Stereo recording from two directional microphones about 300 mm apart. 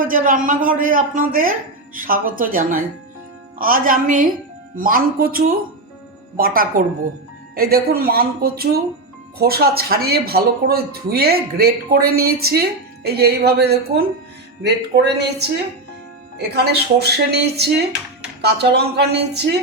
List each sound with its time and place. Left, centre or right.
0.0 s a man's voice: right